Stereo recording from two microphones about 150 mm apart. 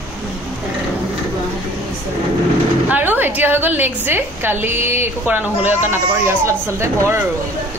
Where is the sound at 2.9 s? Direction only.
10° right (ahead or behind).